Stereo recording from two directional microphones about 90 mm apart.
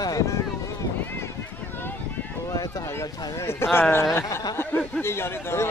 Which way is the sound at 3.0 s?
30° left (ahead or behind).